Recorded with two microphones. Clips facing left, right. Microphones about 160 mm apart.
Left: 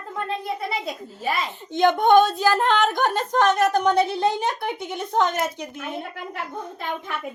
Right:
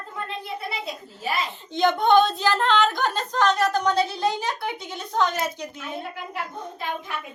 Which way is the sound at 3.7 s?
20° left (ahead or behind).